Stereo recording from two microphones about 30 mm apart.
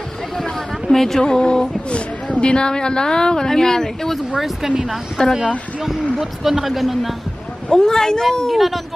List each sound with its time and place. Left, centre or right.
0.4 s a sound: centre
1.2 s speech: left
4.4 s speech: centre
5.2 s speech: left
5.8 s speech: centre
7.7 s speech: left
8.5 s speech: centre